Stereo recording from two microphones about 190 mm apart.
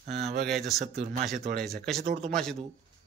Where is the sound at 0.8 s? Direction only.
40° right (ahead or behind).